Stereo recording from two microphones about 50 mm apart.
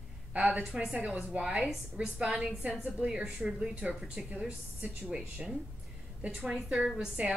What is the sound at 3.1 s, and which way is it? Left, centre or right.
Speech, right.